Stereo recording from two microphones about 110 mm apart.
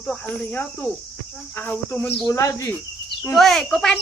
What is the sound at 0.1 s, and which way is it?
Cricket, 15° left (ahead or behind).